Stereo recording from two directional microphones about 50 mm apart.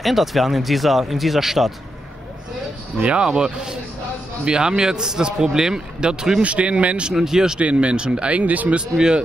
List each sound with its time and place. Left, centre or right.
0.0 s speech: centre
3.0 s speech: centre
6.4 s speech: right
7.2 s speech: centre
7.6 s speech: right
8.7 s speech: centre